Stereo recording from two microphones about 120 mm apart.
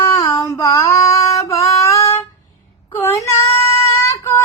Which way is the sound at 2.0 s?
55° left (ahead or behind).